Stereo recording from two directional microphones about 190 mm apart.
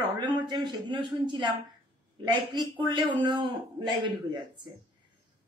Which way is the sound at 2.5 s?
20° right (ahead or behind).